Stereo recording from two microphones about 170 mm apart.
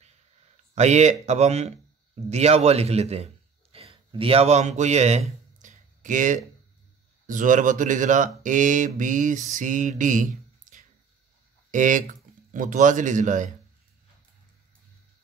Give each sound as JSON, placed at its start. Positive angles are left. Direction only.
{"t": 0.7, "sound": "a man's voice", "side_deg": -40}
{"t": 5.6, "sound": "a sound", "side_deg": -50}
{"t": 7.2, "sound": "speech", "side_deg": -50}